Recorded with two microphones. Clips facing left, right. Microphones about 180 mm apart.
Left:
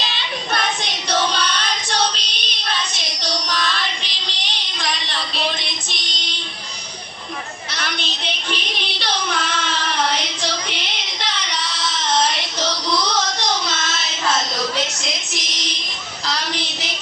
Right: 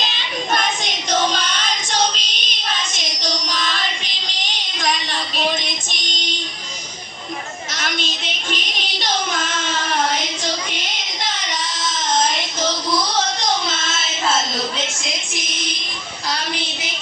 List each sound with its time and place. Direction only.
0.5 s child singing: 45° right (ahead or behind)
7.8 s child singing: 45° right (ahead or behind)